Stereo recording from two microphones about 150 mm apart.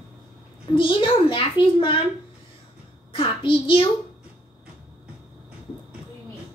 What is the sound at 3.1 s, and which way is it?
Speech, 35° left (ahead or behind).